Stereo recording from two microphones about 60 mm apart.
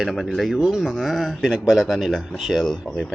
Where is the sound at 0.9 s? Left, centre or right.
Centre.